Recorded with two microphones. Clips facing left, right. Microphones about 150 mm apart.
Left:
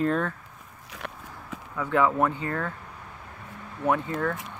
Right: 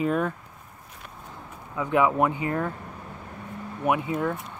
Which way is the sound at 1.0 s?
70° left (ahead or behind).